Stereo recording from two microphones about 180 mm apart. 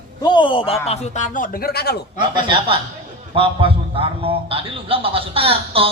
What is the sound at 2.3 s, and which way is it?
A woman's voice, 25° right (ahead or behind).